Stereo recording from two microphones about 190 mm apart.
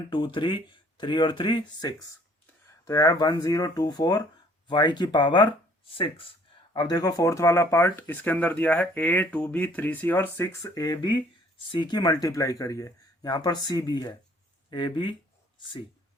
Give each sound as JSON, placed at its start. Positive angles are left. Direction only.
{"t": 0.1, "sound": "speech", "side_deg": 25}
{"t": 6.7, "sound": "speech", "side_deg": 20}